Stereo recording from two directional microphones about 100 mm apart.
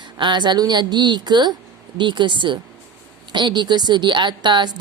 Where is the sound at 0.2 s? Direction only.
50° right (ahead or behind).